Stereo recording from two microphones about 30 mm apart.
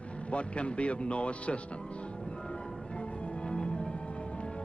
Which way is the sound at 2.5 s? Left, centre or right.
Left.